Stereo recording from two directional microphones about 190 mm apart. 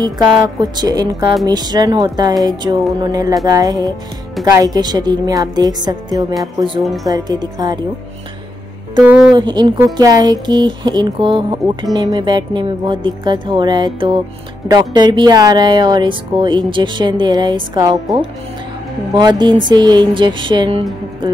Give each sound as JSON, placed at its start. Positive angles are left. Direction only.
{"t": 0.6, "sound": "speech", "side_deg": -20}
{"t": 9.0, "sound": "speech", "side_deg": -5}
{"t": 9.3, "sound": "speech", "side_deg": -25}